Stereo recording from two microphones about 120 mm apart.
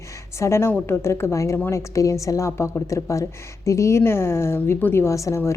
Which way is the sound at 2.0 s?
25° left (ahead or behind).